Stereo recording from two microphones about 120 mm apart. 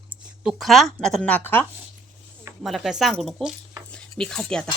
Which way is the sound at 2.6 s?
Centre (ahead or behind).